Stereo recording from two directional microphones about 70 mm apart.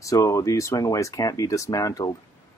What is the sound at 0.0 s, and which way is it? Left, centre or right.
Speech, left.